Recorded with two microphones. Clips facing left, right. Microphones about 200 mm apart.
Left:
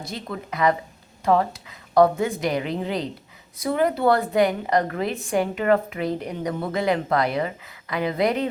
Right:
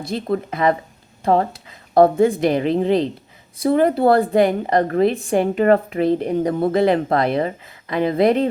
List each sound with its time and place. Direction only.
0.0 s a woman's voice: 30° right (ahead or behind)